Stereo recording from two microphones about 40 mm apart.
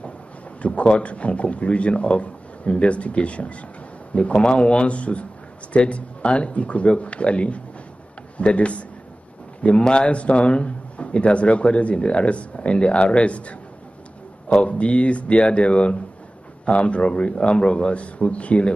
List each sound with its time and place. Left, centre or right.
0.6 s a man's voice: left
14.7 s speech: left